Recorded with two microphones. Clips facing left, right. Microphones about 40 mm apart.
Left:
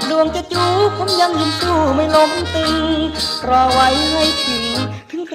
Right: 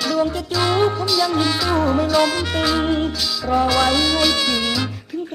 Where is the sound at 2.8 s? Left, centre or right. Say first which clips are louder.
Left 2 dB; left.